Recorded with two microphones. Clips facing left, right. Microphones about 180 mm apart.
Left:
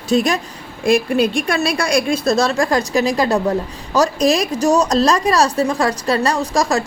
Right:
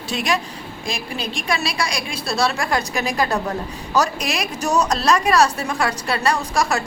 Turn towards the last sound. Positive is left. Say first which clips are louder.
# left 3 dB
turn(degrees=35)  # may be behind; listen again after turning